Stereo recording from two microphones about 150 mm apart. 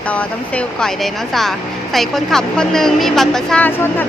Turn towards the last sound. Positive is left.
turn(degrees=15)  # may be behind; listen again after turning